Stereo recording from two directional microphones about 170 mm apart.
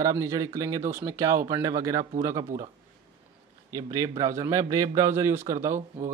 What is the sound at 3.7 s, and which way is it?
A man's voice, 20° right (ahead or behind).